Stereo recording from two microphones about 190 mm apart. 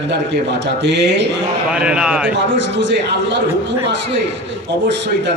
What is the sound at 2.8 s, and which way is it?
Speech, 75° right (ahead or behind).